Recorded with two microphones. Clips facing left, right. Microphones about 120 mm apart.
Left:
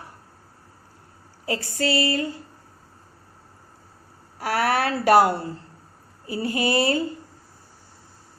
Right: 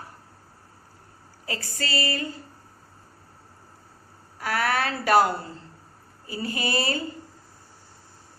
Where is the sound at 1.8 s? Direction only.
65° left (ahead or behind).